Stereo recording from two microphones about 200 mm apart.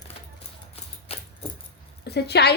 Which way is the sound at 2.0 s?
55° left (ahead or behind).